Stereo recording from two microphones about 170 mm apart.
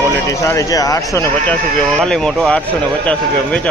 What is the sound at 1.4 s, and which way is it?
Speech, 5° left (ahead or behind).